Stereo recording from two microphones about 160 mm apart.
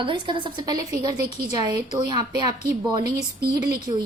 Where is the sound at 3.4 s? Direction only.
70° right (ahead or behind).